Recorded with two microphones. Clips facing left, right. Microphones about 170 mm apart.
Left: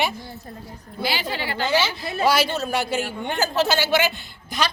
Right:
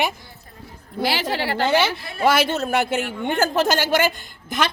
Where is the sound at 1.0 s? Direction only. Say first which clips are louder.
Right 4 dB; 85° right.